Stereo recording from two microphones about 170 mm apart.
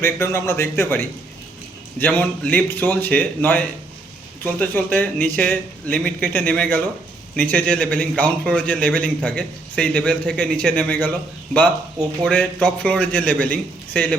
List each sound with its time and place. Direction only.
0.2 s a man's voice: 15° left (ahead or behind)
12.2 s a man's voice: 5° left (ahead or behind)